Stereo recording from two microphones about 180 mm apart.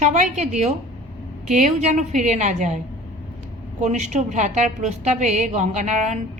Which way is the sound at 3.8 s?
40° right (ahead or behind).